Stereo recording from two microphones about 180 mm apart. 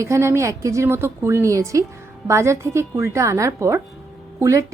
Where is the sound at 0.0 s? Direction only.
15° right (ahead or behind).